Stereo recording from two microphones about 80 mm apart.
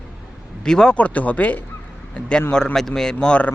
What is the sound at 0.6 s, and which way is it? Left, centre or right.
Speech, centre.